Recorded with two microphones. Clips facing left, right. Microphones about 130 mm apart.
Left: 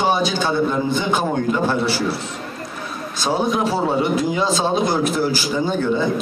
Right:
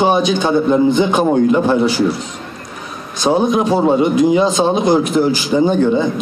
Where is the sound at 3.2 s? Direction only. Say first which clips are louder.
Right 6 dB; 20° right (ahead or behind).